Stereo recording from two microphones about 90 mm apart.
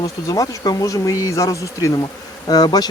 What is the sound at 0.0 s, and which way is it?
Speech, 45° left (ahead or behind).